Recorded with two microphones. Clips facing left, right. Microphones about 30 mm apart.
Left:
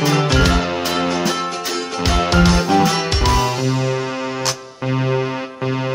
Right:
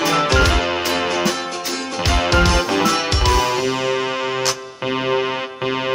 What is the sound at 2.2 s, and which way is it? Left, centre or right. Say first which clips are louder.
Music: left 1 dB; centre.